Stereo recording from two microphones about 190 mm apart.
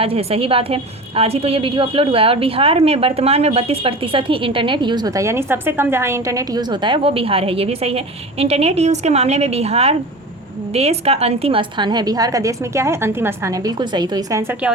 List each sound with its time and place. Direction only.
0.0 s a woman's voice: 30° right (ahead or behind); by 14.7 s 15° right (ahead or behind)